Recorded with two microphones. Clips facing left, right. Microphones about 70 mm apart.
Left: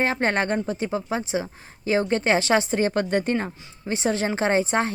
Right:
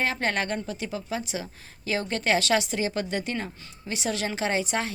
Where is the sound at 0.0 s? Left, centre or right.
Left.